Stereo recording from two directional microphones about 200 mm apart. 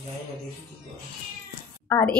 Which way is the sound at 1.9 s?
10° left (ahead or behind).